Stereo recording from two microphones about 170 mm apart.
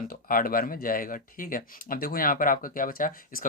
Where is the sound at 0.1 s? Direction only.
55° left (ahead or behind).